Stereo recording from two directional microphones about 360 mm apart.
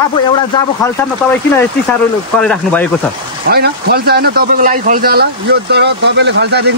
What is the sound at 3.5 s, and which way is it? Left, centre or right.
Speech, right.